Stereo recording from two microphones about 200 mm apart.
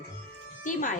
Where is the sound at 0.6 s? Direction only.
40° left (ahead or behind).